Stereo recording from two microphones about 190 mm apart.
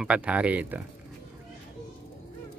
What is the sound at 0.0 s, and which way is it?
Speech, 5° right (ahead or behind).